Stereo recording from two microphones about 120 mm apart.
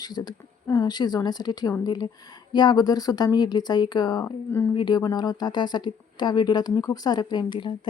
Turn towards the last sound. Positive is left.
turn(degrees=40)  # may be behind; listen again after turning